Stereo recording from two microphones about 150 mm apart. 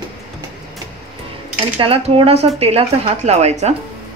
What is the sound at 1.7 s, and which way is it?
Cutlery, 40° right (ahead or behind).